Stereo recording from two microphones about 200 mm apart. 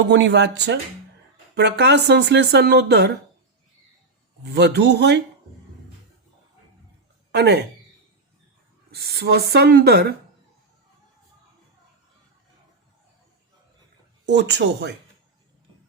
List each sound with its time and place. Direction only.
0.1 s speech: 65° right (ahead or behind)
4.4 s speech: 60° right (ahead or behind)
7.3 s speech: 55° right (ahead or behind)
8.9 s speech: 55° right (ahead or behind)
14.3 s speech: 60° right (ahead or behind)